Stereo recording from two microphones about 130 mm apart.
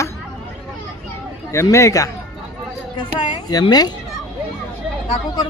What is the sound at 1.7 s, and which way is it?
Speech, 25° left (ahead or behind).